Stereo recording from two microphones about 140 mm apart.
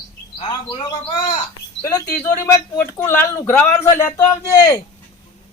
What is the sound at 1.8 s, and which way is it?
Speech, 15° left (ahead or behind).